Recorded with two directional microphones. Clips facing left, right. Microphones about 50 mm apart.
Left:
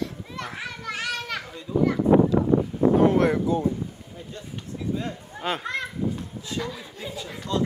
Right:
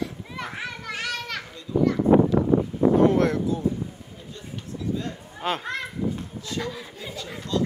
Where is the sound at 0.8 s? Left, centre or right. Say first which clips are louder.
Left 3 dB; centre.